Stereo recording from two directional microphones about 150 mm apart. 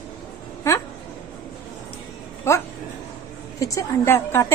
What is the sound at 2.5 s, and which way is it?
A woman's voice, 20° left (ahead or behind).